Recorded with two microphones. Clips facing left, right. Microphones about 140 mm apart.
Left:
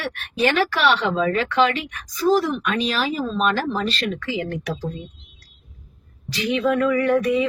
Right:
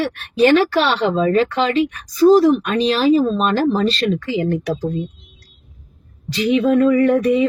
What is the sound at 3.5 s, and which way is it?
A woman's voice, 30° right (ahead or behind).